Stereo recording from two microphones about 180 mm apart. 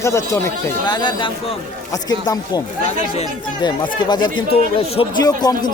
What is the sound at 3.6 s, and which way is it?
Speech, 25° left (ahead or behind).